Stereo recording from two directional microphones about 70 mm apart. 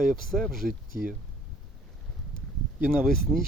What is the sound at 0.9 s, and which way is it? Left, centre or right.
Speech, right.